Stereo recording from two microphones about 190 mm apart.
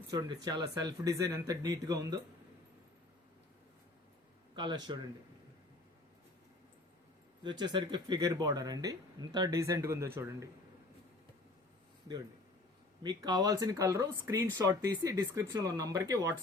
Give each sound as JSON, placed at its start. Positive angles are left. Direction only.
{"t": 0.1, "sound": "speech", "side_deg": -20}
{"t": 4.5, "sound": "speech", "side_deg": -25}
{"t": 7.4, "sound": "speech", "side_deg": -25}
{"t": 13.0, "sound": "speech", "side_deg": -20}